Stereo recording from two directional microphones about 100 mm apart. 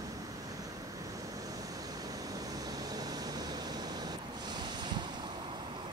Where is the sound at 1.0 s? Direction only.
35° right (ahead or behind).